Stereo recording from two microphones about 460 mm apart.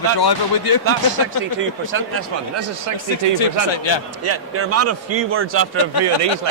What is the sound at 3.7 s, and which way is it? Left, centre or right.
Speech, left.